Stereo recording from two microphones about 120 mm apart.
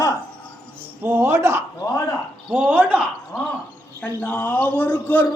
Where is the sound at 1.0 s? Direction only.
20° right (ahead or behind).